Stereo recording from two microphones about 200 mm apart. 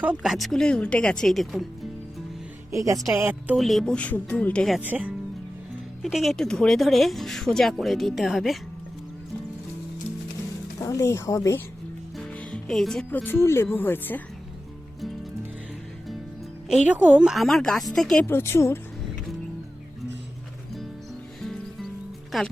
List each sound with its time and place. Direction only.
0.0 s speech: 5° right (ahead or behind)
2.7 s speech: 15° right (ahead or behind)
10.8 s speech: 15° left (ahead or behind)
12.1 s speech: centre (ahead or behind)
16.6 s speech: 5° right (ahead or behind); by 18.8 s 15° left (ahead or behind)
21.4 s music: centre (ahead or behind)
22.3 s speech: centre (ahead or behind)